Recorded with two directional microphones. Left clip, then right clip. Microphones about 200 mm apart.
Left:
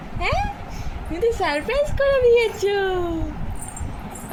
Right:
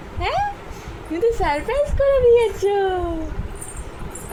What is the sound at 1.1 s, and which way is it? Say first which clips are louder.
Speech: right 2 dB; 30° right (ahead or behind).